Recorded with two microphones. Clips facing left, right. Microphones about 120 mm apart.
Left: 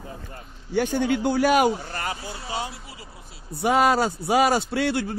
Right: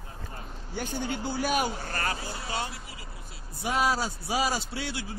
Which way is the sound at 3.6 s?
65° left (ahead or behind).